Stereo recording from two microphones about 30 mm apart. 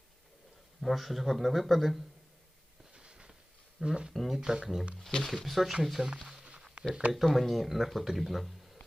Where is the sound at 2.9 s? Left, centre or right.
Right.